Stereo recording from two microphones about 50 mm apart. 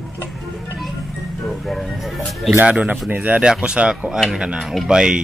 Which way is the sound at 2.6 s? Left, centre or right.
Right.